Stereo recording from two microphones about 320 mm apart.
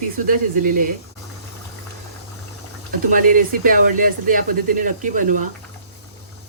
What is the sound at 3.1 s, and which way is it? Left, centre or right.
Speech, right.